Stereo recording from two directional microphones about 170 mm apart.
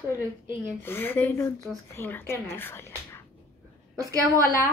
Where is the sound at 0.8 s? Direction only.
15° left (ahead or behind).